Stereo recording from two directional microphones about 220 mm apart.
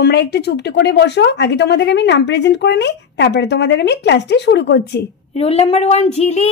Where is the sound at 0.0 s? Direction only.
45° left (ahead or behind).